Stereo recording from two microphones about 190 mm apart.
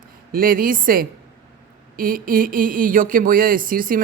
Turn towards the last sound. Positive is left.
turn(degrees=-45)  # may be behind; listen again after turning